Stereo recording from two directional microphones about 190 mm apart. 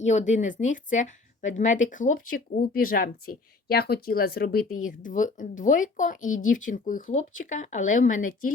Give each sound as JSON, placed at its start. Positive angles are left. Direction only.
{"t": 0.0, "sound": "speech", "side_deg": 40}
{"t": 4.9, "sound": "speech", "side_deg": 45}